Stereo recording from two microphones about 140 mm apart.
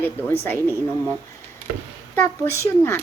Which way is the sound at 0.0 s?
15° left (ahead or behind).